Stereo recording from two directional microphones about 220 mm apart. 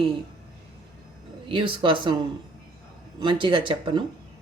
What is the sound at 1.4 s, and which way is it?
Speech, 25° right (ahead or behind).